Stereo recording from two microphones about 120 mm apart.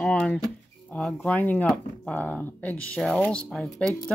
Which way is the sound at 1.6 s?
5° left (ahead or behind).